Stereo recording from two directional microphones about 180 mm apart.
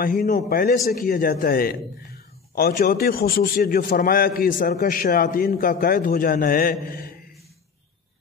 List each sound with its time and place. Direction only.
0.0 s a man's voice: 50° left (ahead or behind)